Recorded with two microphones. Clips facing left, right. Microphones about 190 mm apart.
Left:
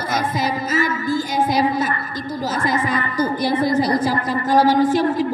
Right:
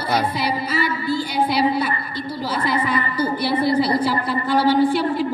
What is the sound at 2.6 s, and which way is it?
A woman's voice, 45° left (ahead or behind).